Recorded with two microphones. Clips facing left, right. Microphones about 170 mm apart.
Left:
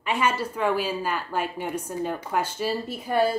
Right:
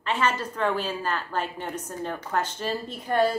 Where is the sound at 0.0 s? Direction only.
10° left (ahead or behind).